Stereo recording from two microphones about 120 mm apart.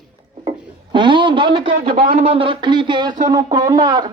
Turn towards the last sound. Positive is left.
turn(degrees=-35)  # may be behind; listen again after turning